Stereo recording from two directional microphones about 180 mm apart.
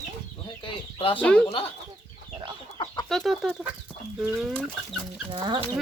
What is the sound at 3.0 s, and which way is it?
Chicken, centre (ahead or behind).